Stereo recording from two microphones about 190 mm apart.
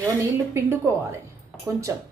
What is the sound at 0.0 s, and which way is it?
Speech, 15° right (ahead or behind).